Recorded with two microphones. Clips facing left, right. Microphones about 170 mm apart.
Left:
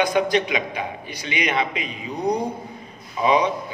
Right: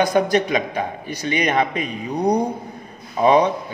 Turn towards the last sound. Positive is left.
turn(degrees=-50)  # may be behind; listen again after turning